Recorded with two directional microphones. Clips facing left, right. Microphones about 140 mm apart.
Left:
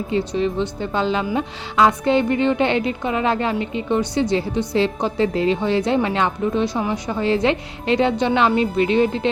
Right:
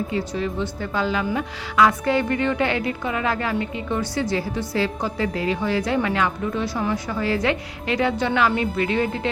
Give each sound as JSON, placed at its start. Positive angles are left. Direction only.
{"t": 0.1, "sound": "a woman's voice", "side_deg": 25}